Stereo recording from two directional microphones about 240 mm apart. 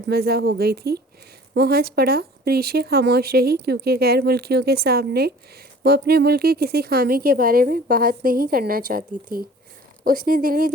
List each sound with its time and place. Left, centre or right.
0.1 s speech: right